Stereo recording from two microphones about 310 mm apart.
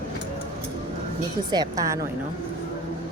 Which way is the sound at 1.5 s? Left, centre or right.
Centre.